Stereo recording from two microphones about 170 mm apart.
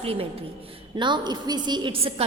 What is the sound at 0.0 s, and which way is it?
A woman's voice, 35° right (ahead or behind).